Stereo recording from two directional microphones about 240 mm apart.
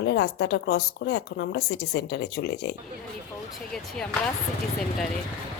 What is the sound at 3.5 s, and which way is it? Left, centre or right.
Speech, centre.